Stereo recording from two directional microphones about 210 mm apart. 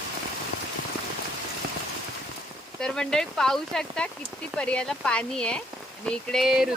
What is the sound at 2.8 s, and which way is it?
Speech, 5° left (ahead or behind).